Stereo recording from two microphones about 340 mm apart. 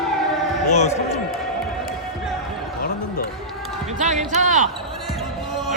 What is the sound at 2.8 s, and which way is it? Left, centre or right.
Basketball bounce, left.